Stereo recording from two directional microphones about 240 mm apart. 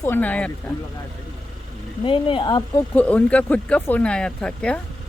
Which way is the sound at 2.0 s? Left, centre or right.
Left.